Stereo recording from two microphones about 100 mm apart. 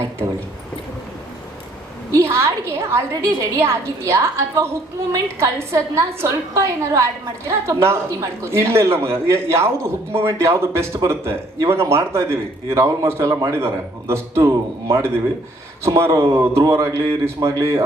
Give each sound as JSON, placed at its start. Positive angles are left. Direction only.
{"t": 2.1, "sound": "a woman's voice", "side_deg": -30}